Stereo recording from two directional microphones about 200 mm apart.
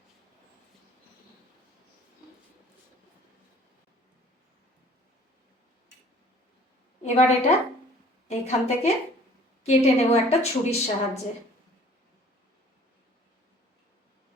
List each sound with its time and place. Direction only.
7.0 s a woman's voice: 35° left (ahead or behind)